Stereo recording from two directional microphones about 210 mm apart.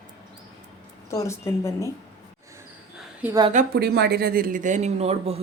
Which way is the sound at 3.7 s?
50° right (ahead or behind).